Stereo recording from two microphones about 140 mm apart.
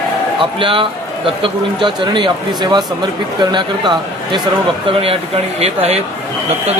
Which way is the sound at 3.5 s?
35° right (ahead or behind).